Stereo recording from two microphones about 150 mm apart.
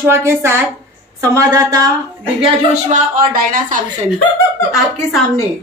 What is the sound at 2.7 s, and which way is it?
Speech, 60° right (ahead or behind).